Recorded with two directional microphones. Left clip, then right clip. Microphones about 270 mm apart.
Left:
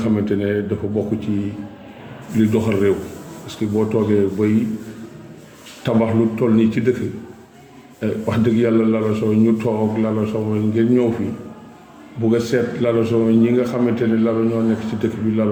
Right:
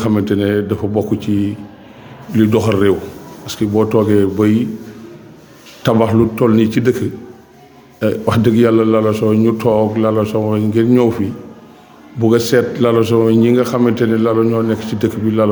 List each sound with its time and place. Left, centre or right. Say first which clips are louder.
0.0 s a man's voice: right 5 dB; right
2.3 s a man's voice: right 5 dB; right
5.8 s a man's voice: right 5 dB; right
8.0 s a man's voice: right 6 dB; right
12.2 s a man's voice: right 6 dB; right